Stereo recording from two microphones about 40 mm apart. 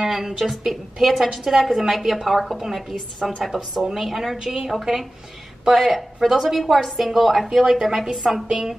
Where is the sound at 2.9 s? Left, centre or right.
Centre.